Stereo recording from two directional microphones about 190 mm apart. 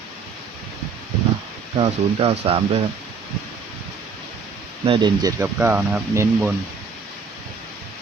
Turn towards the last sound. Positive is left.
turn(degrees=-10)  # may be behind; listen again after turning